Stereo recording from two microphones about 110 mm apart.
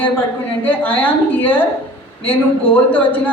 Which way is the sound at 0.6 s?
15° left (ahead or behind).